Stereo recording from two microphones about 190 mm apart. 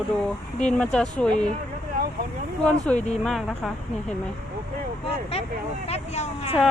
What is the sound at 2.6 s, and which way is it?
Speech, 5° left (ahead or behind).